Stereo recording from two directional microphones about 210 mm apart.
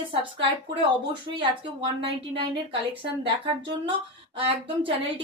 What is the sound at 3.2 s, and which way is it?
A woman's voice, 25° right (ahead or behind).